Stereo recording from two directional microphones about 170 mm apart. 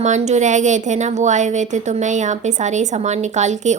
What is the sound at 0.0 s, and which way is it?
A woman's voice, 45° right (ahead or behind).